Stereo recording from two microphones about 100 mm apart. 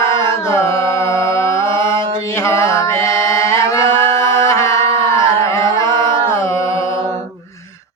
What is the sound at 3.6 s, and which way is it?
Chant, 30° left (ahead or behind).